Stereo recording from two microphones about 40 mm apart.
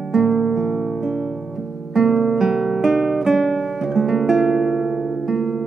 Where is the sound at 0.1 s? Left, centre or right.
Centre.